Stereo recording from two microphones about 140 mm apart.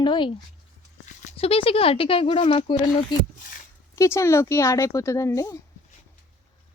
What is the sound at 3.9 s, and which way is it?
Speech, 20° left (ahead or behind).